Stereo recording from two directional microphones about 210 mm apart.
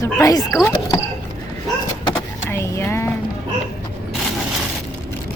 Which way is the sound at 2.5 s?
15° left (ahead or behind).